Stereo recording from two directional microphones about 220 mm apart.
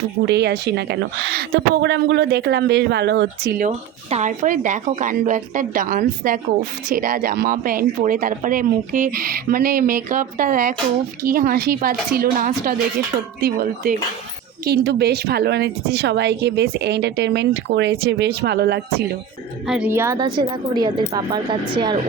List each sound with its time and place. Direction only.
0.3 s a woman's voice: 50° right (ahead or behind)
3.7 s a woman's voice: 30° right (ahead or behind); by 19.0 s 45° right (ahead or behind)
19.6 s a woman's voice: 5° right (ahead or behind); by 21.9 s 20° right (ahead or behind)